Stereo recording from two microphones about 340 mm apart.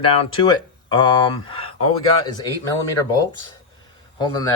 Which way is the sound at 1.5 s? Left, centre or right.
Centre.